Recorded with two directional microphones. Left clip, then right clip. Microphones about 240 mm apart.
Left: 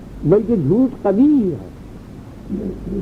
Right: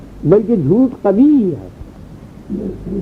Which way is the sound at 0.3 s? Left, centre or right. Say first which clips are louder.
Right 3 dB; right.